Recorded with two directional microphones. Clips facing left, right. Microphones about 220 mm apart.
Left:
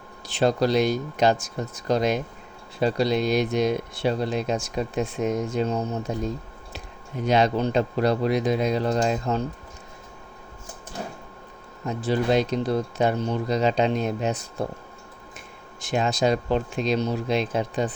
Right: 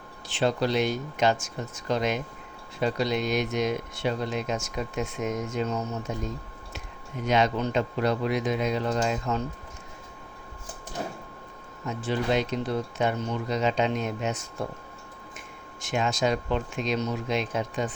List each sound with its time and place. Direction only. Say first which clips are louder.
0.3 s speech: left 4 dB; 40° left (ahead or behind)
11.9 s speech: left 4 dB; 35° left (ahead or behind)
15.8 s speech: left 3 dB; 35° left (ahead or behind)